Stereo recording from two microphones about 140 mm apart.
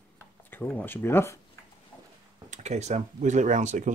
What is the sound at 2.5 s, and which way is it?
Speech, 55° right (ahead or behind).